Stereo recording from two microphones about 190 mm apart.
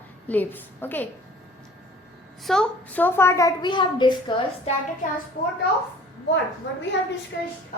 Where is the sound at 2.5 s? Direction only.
5° left (ahead or behind); by 4.4 s 25° left (ahead or behind).